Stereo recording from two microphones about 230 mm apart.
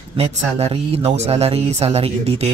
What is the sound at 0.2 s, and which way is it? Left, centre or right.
Speech, right.